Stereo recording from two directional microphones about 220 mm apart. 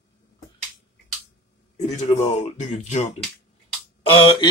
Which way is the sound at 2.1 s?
25° left (ahead or behind).